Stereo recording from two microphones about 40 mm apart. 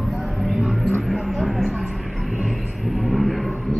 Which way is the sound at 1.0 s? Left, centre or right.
Centre.